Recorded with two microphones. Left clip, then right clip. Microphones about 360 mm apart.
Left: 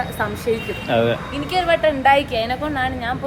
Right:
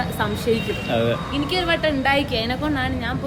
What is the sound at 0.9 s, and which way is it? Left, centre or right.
Speech, centre.